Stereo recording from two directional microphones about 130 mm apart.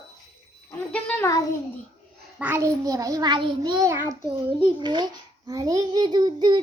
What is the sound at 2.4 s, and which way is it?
Speech, 15° right (ahead or behind).